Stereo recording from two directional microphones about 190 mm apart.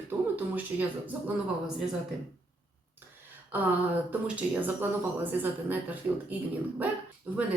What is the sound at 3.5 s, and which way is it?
Speech, 10° right (ahead or behind).